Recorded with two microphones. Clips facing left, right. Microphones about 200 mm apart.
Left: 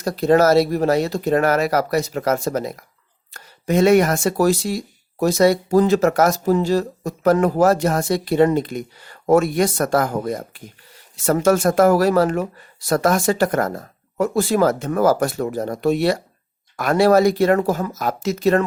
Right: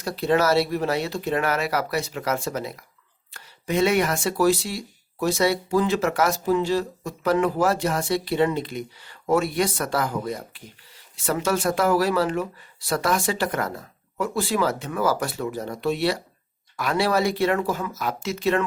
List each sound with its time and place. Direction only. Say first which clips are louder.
0.0 s speech: left 6 dB; 40° left (ahead or behind)